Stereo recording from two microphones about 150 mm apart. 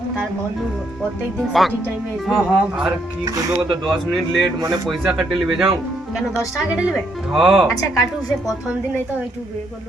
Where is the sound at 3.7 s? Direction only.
Centre (ahead or behind).